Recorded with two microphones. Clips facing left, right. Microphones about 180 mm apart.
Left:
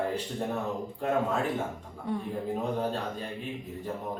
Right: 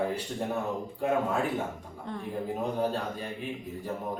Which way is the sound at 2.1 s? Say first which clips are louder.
Left 6 dB; 10° left (ahead or behind).